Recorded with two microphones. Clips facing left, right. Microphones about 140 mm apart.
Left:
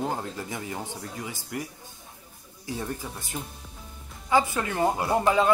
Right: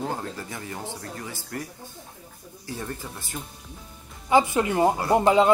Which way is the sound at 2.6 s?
15° left (ahead or behind).